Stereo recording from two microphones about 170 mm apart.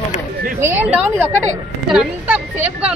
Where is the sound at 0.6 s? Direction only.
5° right (ahead or behind).